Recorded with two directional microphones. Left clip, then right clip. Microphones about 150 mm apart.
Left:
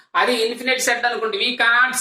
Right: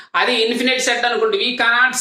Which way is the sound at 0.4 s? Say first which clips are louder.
Right 3 dB; 25° right (ahead or behind).